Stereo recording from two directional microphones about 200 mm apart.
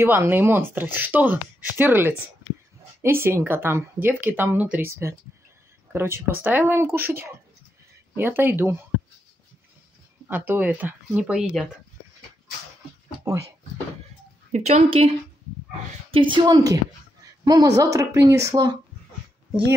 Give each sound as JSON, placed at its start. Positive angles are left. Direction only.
{"t": 0.0, "sound": "a woman's voice", "side_deg": -10}
{"t": 8.2, "sound": "a woman's voice", "side_deg": -10}
{"t": 10.2, "sound": "a woman's voice", "side_deg": -10}
{"t": 13.2, "sound": "a woman's voice", "side_deg": -15}
{"t": 14.5, "sound": "a woman's voice", "side_deg": -30}